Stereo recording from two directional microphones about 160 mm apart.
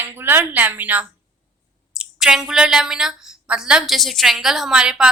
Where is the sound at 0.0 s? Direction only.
15° right (ahead or behind).